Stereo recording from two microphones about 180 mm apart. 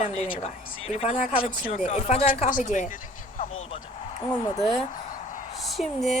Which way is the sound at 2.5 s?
45° left (ahead or behind).